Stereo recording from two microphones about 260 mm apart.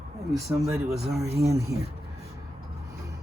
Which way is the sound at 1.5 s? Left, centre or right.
Centre.